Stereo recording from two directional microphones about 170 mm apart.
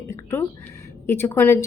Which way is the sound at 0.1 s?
15° left (ahead or behind).